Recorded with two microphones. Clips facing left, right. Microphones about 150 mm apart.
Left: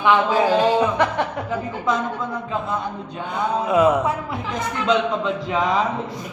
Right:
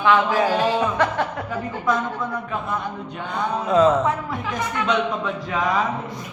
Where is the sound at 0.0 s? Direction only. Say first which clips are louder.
Left 1 dB; 15° left (ahead or behind).